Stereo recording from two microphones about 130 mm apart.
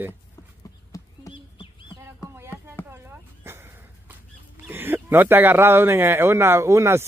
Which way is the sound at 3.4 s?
20° right (ahead or behind).